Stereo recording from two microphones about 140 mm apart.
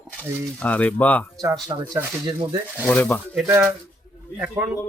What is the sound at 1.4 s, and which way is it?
Speech, 25° right (ahead or behind).